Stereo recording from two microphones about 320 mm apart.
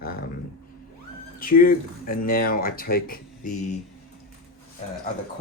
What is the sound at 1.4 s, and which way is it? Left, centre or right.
Speech, left.